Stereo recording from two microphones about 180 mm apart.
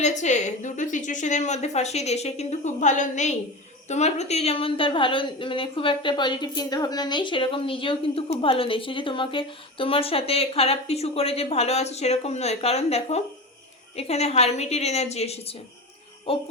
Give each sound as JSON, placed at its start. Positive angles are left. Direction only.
{"t": 0.0, "sound": "a woman's voice", "side_deg": 40}